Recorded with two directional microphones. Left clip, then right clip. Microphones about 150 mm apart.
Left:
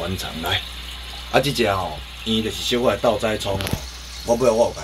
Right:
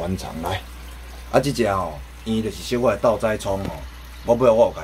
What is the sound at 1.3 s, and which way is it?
Speech, 25° right (ahead or behind).